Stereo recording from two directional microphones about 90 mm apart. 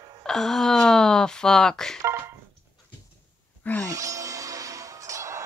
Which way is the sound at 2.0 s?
30° right (ahead or behind).